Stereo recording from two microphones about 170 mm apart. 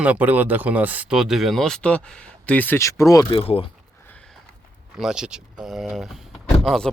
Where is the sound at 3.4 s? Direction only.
35° left (ahead or behind).